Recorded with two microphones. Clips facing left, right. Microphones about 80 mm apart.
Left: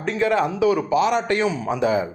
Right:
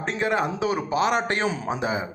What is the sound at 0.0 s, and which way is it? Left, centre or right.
A man's voice, right.